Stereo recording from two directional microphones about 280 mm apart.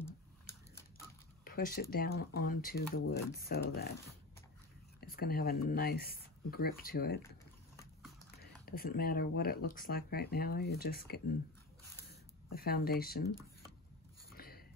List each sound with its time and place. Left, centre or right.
0.7 s typewriter: centre
1.4 s speech: left
5.0 s speech: left
8.6 s speech: left
12.5 s speech: left
14.3 s a sound: left